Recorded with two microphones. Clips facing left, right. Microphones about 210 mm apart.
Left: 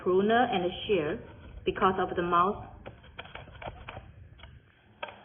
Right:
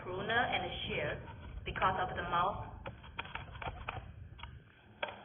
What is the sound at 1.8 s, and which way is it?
Speech, 70° left (ahead or behind).